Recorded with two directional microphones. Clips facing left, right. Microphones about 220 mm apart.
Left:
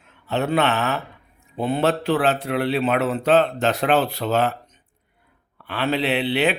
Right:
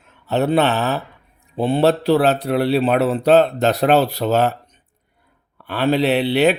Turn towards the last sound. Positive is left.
turn(degrees=-40)  # may be behind; listen again after turning